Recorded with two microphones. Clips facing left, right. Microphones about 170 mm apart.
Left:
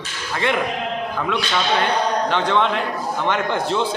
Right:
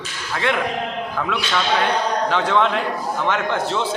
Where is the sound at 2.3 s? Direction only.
5° right (ahead or behind).